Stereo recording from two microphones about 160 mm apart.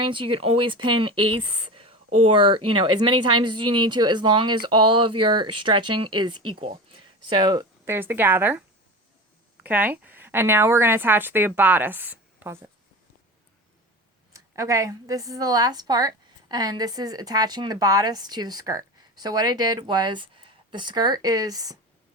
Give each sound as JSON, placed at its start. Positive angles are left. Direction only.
{"t": 0.0, "sound": "speech", "side_deg": -30}
{"t": 7.9, "sound": "a woman's voice", "side_deg": -15}
{"t": 9.6, "sound": "a woman's voice", "side_deg": -10}
{"t": 14.3, "sound": "a woman's voice", "side_deg": -20}